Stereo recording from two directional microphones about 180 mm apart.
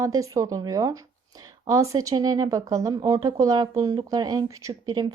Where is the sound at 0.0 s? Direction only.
20° right (ahead or behind).